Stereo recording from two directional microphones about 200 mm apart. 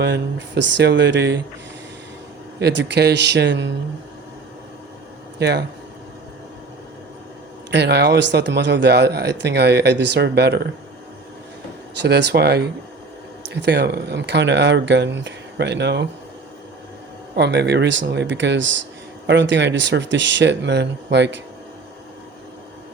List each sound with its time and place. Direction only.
0.0 s speech: 55° right (ahead or behind)
2.6 s speech: 55° right (ahead or behind)
5.4 s speech: 55° right (ahead or behind)
7.7 s speech: 55° right (ahead or behind)
12.0 s speech: 55° right (ahead or behind)
17.3 s speech: 55° right (ahead or behind)